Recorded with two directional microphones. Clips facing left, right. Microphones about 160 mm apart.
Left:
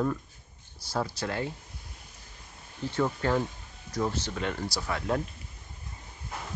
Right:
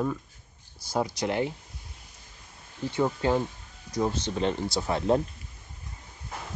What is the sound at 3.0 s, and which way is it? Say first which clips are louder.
Speech: right 2 dB; 20° right (ahead or behind).